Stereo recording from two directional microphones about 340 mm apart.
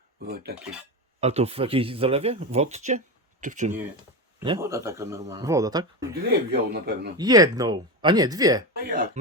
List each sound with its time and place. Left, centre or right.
0.3 s speech: right
4.4 s speech: centre
6.5 s speech: right
7.2 s speech: centre
8.8 s speech: right